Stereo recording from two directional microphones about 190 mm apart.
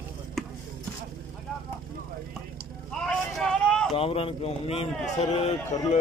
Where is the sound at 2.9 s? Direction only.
5° left (ahead or behind).